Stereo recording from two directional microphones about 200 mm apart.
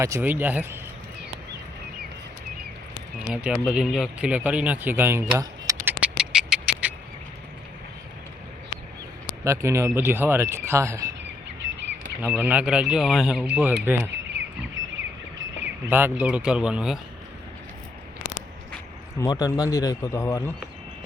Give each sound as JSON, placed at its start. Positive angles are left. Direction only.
{"t": 0.0, "sound": "speech", "side_deg": -10}
{"t": 3.2, "sound": "speech", "side_deg": -5}
{"t": 5.3, "sound": "a sound", "side_deg": -15}
{"t": 9.4, "sound": "speech", "side_deg": -15}
{"t": 12.2, "sound": "speech", "side_deg": -5}
{"t": 15.6, "sound": "speech", "side_deg": -10}
{"t": 19.2, "sound": "speech", "side_deg": 15}